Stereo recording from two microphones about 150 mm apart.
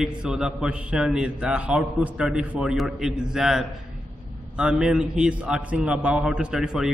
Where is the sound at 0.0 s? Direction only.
5° right (ahead or behind).